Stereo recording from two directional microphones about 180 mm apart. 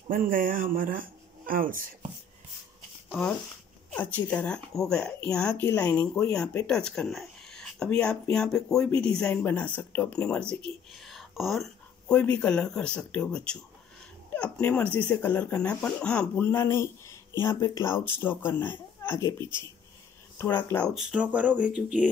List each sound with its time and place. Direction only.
0.1 s speech: 50° right (ahead or behind)
3.1 s speech: 10° left (ahead or behind)
5.7 s speech: 15° left (ahead or behind)
5.9 s speech: 5° left (ahead or behind)
20.9 s speech: 5° right (ahead or behind)